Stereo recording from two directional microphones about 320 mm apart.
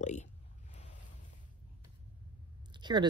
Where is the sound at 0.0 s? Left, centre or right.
Left.